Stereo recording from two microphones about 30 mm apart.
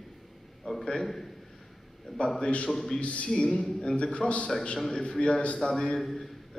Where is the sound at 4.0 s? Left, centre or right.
Left.